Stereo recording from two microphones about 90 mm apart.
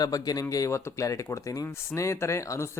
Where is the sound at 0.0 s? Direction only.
45° left (ahead or behind).